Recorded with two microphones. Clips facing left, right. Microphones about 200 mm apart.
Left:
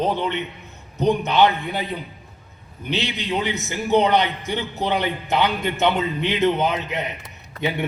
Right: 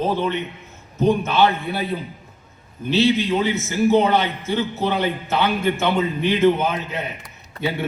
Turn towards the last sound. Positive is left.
turn(degrees=20)  # may be behind; listen again after turning